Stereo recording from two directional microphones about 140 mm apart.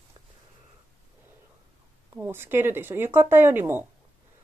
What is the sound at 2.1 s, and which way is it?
Speech, 15° right (ahead or behind).